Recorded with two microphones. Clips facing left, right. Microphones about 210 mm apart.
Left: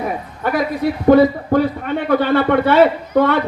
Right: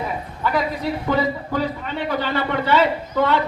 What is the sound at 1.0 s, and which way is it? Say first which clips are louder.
A man's voice: left 13 dB; 55° left (ahead or behind).